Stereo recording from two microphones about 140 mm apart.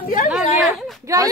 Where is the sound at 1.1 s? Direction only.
25° right (ahead or behind).